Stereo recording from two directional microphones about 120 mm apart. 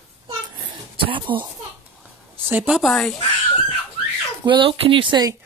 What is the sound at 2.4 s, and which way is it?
Speech, 15° right (ahead or behind).